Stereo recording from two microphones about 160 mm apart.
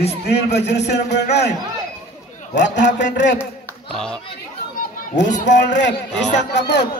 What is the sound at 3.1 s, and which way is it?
Speech, 90° left.